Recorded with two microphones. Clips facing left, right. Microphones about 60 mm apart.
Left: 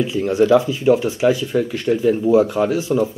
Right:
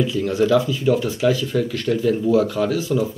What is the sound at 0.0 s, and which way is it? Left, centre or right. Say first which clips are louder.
Speech: left 2 dB; left.